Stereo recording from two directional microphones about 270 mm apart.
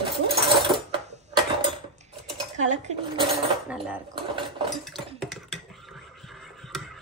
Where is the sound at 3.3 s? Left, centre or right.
Centre.